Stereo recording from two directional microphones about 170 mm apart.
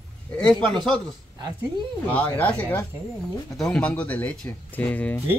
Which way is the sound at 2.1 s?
10° left (ahead or behind).